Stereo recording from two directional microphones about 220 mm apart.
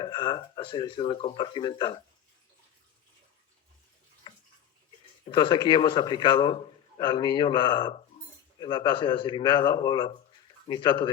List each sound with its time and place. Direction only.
0.0 s speech: 20° left (ahead or behind)
5.2 s speech: 20° left (ahead or behind)